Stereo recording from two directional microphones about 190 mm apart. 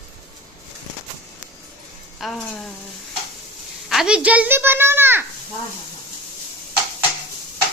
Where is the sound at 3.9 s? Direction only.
5° right (ahead or behind).